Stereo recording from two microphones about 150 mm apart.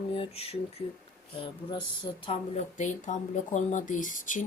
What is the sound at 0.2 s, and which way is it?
Speech, 45° left (ahead or behind).